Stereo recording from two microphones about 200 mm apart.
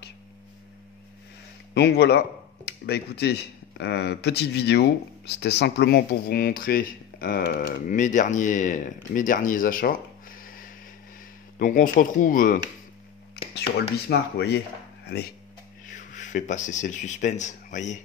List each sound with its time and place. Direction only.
1.7 s speech: 55° left (ahead or behind)
10.4 s a sound: 45° left (ahead or behind)
11.5 s speech: 40° left (ahead or behind)
13.6 s speech: 55° left (ahead or behind)
15.9 s speech: 40° left (ahead or behind)